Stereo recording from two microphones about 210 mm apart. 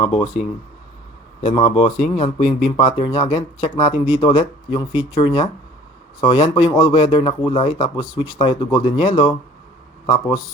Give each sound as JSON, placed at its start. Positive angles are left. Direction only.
{"t": 0.0, "sound": "speech", "side_deg": 25}
{"t": 1.4, "sound": "speech", "side_deg": 30}